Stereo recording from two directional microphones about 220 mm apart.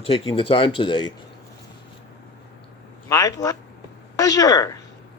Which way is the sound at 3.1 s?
15° left (ahead or behind).